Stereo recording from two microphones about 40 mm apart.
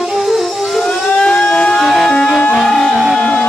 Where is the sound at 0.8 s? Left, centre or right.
Left.